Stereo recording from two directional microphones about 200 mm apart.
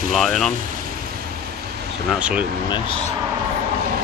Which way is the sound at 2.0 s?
5° right (ahead or behind).